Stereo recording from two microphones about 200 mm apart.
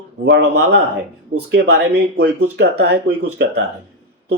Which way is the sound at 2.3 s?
90° right.